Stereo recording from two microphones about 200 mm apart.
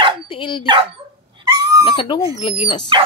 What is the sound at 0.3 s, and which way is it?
Speech, 25° left (ahead or behind).